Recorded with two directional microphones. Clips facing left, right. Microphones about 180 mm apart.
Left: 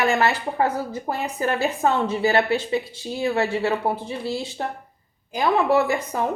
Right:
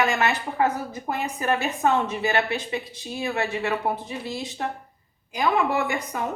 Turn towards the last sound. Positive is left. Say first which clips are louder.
# left 6 dB
turn(degrees=35)  # may be behind; listen again after turning